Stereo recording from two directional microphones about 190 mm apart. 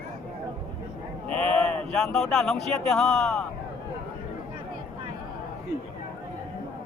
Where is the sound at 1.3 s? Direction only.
5° left (ahead or behind).